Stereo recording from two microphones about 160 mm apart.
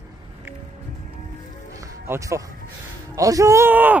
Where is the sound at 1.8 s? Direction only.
20° right (ahead or behind).